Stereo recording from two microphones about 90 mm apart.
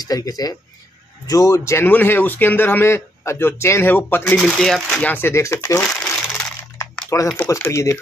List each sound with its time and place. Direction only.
0.0 s speech: 40° left (ahead or behind)
1.9 s a man's voice: 20° left (ahead or behind)
4.4 s speech: centre (ahead or behind)
5.0 s a man's voice: 20° left (ahead or behind)
5.3 s speech: 35° left (ahead or behind)
6.1 s crushing: 5° left (ahead or behind)
7.1 s speech: 30° left (ahead or behind)